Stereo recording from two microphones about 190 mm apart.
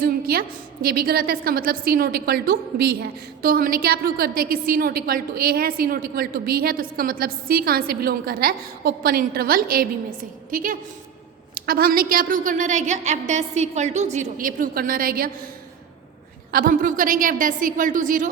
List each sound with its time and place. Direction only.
0.0 s a woman's voice: 50° right (ahead or behind)
16.5 s a woman's voice: 50° right (ahead or behind)